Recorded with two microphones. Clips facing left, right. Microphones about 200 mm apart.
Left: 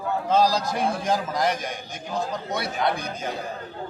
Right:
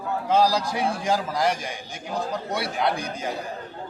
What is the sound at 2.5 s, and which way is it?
Speech, 10° right (ahead or behind).